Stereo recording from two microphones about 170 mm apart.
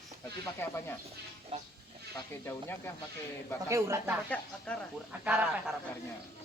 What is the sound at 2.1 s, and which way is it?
Speech, 15° left (ahead or behind).